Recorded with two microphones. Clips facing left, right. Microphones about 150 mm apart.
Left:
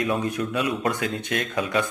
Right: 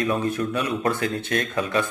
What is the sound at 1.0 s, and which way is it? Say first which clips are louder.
Speech: right 2 dB; 15° left (ahead or behind).